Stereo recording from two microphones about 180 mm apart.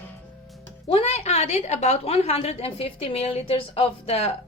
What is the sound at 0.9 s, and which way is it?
A woman's voice, 35° left (ahead or behind).